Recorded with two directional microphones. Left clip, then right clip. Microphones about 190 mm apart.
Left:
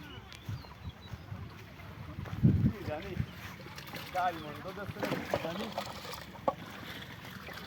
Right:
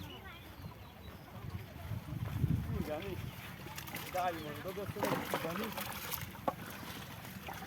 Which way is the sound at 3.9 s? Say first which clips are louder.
Left 4 dB; 10° left (ahead or behind).